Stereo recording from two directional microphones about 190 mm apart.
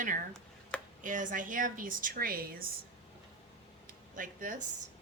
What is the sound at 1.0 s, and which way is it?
A woman's voice, 45° right (ahead or behind).